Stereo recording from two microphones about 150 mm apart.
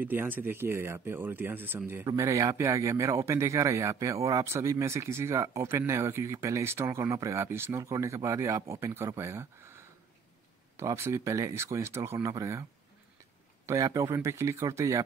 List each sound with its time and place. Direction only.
0.0 s a man's voice: 15° right (ahead or behind)
13.7 s a man's voice: 20° right (ahead or behind)